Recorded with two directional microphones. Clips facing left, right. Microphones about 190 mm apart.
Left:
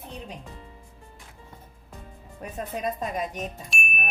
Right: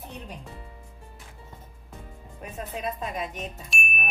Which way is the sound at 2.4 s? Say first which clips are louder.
Left 3 dB; 40° left (ahead or behind).